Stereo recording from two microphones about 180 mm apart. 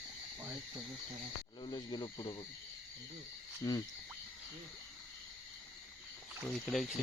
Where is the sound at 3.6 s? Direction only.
20° left (ahead or behind).